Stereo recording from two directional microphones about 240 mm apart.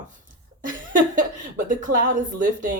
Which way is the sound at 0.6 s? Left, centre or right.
Right.